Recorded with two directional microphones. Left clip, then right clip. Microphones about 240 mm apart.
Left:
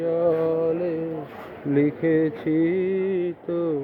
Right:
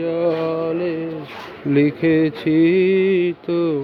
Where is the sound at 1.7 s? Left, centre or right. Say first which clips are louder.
Right 4 dB; right.